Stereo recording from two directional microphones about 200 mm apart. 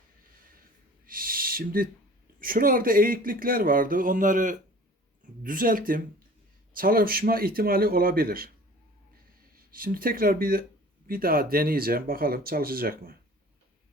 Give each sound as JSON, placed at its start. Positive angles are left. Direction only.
{"t": 1.0, "sound": "owl", "side_deg": -45}
{"t": 2.4, "sound": "speech", "side_deg": -45}
{"t": 9.7, "sound": "speech", "side_deg": -45}